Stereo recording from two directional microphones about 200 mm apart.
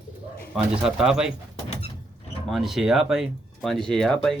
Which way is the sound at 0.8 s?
5° right (ahead or behind).